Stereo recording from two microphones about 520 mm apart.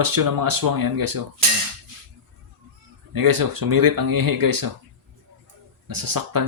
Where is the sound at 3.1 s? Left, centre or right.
Right.